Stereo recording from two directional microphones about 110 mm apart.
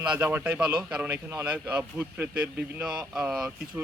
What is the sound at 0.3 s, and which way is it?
Speech, 15° right (ahead or behind).